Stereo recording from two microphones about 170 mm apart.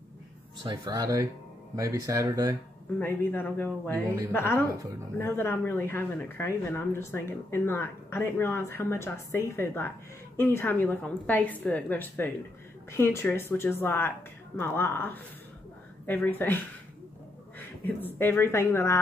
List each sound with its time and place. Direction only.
0.7 s speech: 25° right (ahead or behind)
3.0 s speech: 10° left (ahead or behind)